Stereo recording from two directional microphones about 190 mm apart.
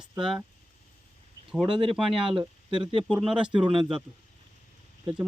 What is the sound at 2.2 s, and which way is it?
Speech, 25° right (ahead or behind).